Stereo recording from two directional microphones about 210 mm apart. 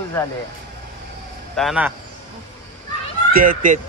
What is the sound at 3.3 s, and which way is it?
Speech, 40° right (ahead or behind).